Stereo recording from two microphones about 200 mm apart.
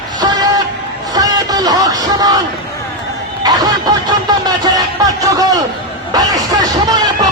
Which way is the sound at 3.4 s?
20° right (ahead or behind).